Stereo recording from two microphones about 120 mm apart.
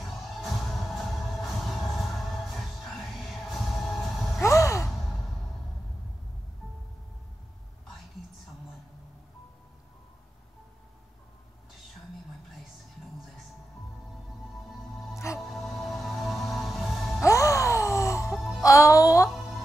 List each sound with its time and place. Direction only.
0.0 s music: centre (ahead or behind)
4.4 s gasp: 25° left (ahead or behind)
14.7 s music: centre (ahead or behind)
17.2 s music: 25° left (ahead or behind)
18.3 s music: centre (ahead or behind)
18.6 s music: 25° left (ahead or behind)
19.2 s music: centre (ahead or behind)